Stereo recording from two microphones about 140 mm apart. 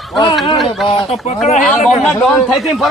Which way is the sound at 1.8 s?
Centre (ahead or behind).